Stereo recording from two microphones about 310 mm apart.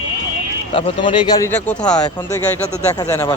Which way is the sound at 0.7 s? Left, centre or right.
Centre.